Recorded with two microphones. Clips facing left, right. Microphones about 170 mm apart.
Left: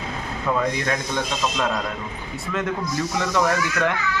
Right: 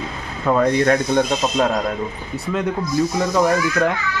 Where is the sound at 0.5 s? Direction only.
45° right (ahead or behind).